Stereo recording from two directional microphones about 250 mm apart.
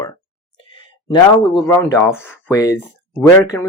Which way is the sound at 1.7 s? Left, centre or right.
Centre.